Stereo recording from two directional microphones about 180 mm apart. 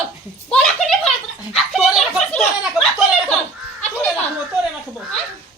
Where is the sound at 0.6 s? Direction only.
Centre (ahead or behind).